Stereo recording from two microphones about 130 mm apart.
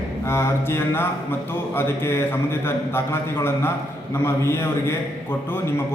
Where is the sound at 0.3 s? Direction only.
20° left (ahead or behind).